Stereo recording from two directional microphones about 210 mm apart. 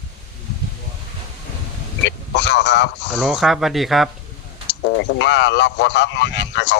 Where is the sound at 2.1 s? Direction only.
55° left (ahead or behind).